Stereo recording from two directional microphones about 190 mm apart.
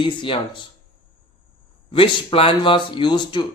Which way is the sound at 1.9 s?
30° left (ahead or behind).